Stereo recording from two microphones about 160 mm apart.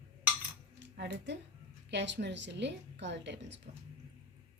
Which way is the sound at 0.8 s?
90° right.